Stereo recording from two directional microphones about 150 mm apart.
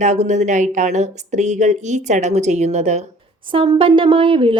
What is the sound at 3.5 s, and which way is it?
A woman's voice, 35° right (ahead or behind).